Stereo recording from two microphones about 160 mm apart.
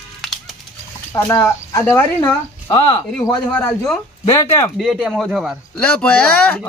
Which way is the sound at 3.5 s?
5° left (ahead or behind).